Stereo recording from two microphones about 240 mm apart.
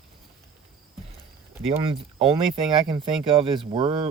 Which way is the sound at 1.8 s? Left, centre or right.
Right.